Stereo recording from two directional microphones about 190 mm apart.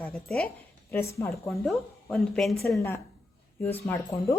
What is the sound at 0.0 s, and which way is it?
A woman's voice, 5° left (ahead or behind).